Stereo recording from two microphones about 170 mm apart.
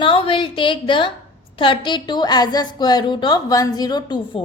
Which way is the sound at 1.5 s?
30° left (ahead or behind).